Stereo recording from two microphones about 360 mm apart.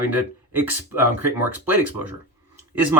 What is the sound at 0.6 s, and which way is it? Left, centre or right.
Speech, centre.